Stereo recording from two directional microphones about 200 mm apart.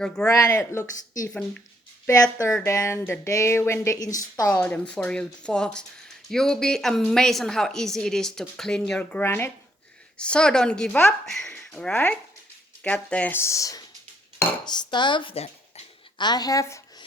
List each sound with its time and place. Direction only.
0.3 s a woman's voice: 15° left (ahead or behind)
2.0 s a woman's voice: 15° left (ahead or behind)